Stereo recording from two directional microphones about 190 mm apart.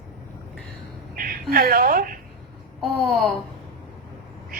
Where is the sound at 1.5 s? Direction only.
50° right (ahead or behind).